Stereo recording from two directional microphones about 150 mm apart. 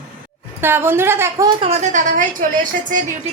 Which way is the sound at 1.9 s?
60° right (ahead or behind).